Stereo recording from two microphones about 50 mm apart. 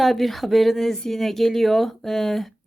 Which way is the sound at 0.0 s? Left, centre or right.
Centre.